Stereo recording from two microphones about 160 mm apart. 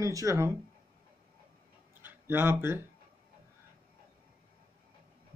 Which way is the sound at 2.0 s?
15° right (ahead or behind).